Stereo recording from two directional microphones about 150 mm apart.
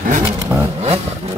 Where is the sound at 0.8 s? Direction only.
45° right (ahead or behind).